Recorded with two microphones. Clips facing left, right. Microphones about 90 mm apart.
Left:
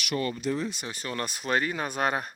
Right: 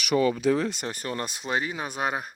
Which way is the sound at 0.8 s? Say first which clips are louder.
Right 4 dB; 45° right (ahead or behind).